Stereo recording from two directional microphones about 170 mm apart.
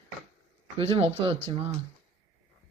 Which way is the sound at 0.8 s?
30° right (ahead or behind).